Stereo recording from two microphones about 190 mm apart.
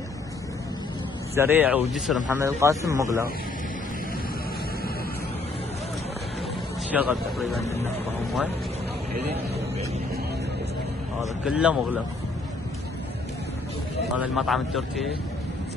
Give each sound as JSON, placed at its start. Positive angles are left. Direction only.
{"t": 1.3, "sound": "speech", "side_deg": -10}
{"t": 2.3, "sound": "speech", "side_deg": -15}
{"t": 6.9, "sound": "speech", "side_deg": -5}
{"t": 11.4, "sound": "a man's voice", "side_deg": -5}
{"t": 14.1, "sound": "a man's voice", "side_deg": -5}